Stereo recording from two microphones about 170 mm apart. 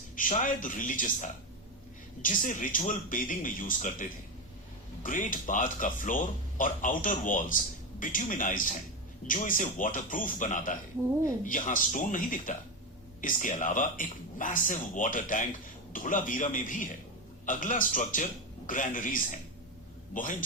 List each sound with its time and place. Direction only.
0.2 s speech: 50° left (ahead or behind)
5.0 s speech: 50° left (ahead or behind)